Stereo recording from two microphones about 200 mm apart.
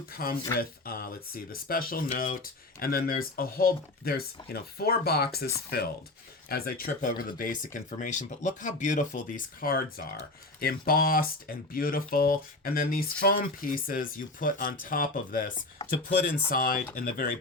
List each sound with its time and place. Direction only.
0.1 s speech: 45° left (ahead or behind)